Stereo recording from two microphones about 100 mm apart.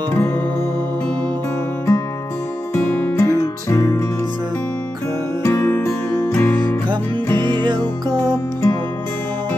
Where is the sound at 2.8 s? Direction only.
20° left (ahead or behind).